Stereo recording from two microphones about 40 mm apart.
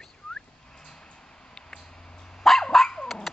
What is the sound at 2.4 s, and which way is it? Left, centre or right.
Dog, centre.